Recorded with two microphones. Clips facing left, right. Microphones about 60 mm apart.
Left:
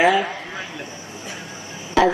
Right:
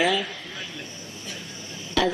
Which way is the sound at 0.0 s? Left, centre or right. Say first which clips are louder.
Left 7 dB; left.